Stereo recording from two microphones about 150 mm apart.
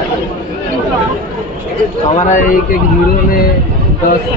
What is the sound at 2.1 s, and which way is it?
Speech, 55° left (ahead or behind).